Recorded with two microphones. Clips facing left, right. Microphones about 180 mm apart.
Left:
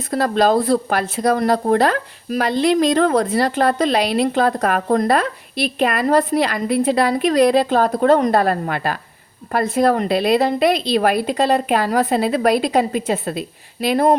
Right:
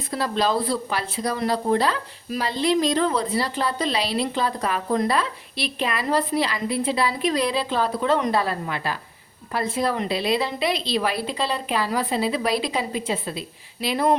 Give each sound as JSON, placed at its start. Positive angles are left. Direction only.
{"t": 0.1, "sound": "a woman's voice", "side_deg": 50}